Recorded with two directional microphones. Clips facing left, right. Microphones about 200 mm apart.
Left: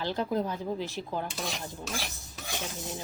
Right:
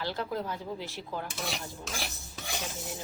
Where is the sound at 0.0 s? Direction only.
20° left (ahead or behind).